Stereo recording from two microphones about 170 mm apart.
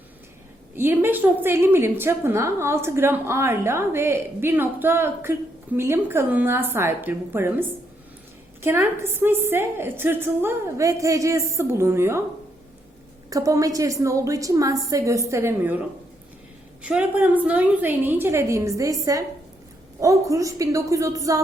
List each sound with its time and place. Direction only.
0.8 s a woman's voice: 15° right (ahead or behind)
8.6 s a woman's voice: 15° right (ahead or behind)
13.3 s a woman's voice: 20° right (ahead or behind)
16.8 s a woman's voice: 5° right (ahead or behind)